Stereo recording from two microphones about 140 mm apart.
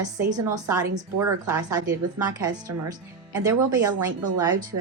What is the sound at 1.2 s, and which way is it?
Speech, 25° right (ahead or behind).